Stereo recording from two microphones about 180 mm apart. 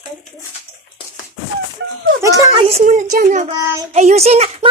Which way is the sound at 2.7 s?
40° right (ahead or behind).